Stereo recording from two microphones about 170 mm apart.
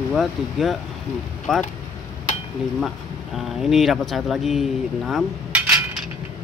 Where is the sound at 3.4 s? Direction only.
Centre (ahead or behind).